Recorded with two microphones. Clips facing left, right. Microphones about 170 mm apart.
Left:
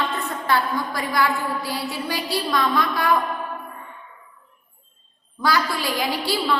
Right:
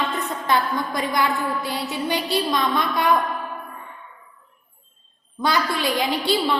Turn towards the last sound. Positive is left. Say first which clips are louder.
# right 2 dB
turn(degrees=-20)  # may be behind; listen again after turning